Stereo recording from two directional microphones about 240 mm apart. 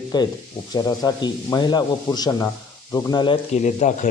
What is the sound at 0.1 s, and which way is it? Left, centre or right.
A man's voice, centre.